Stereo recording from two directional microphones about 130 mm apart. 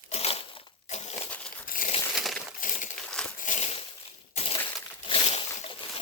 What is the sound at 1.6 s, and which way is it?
Crumpling, 90° left.